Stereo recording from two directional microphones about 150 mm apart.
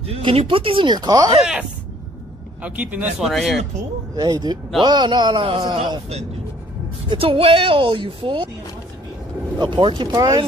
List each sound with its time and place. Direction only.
0.0 s a woman's voice: 40° right (ahead or behind)
1.4 s a sound: 5° right (ahead or behind)
2.6 s speech: 10° right (ahead or behind)
4.1 s a man's voice: 25° right (ahead or behind)
7.1 s a woman's voice: 35° right (ahead or behind)
9.6 s a man's voice: 30° right (ahead or behind)